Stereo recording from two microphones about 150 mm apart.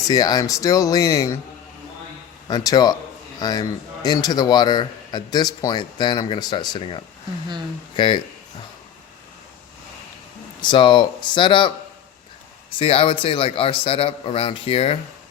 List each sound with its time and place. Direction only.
0.1 s a man's voice: 25° left (ahead or behind)
2.5 s a man's voice: 25° left (ahead or behind)
10.6 s a man's voice: 30° left (ahead or behind)
12.8 s a man's voice: 40° left (ahead or behind)